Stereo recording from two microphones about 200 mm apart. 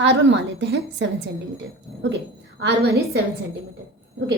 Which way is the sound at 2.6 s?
55° right (ahead or behind).